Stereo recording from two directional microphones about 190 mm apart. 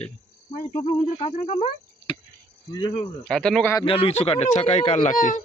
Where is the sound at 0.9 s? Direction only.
30° left (ahead or behind).